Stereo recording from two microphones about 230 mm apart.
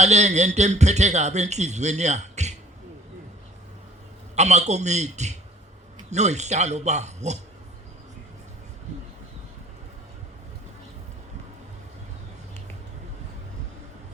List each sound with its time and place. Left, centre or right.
0.0 s a man's voice: right
4.4 s a man's voice: right